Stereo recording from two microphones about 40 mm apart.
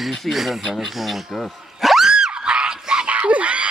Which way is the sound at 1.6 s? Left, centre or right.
Centre.